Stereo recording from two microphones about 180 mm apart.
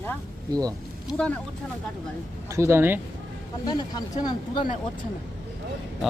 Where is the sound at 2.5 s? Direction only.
15° right (ahead or behind).